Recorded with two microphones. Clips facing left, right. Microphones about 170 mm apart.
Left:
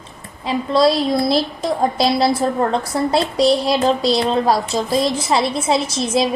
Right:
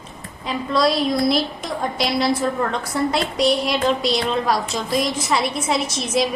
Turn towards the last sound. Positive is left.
turn(degrees=30)  # may be behind; listen again after turning